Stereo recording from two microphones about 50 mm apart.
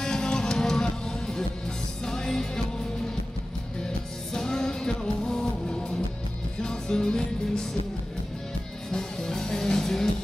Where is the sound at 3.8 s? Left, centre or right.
Centre.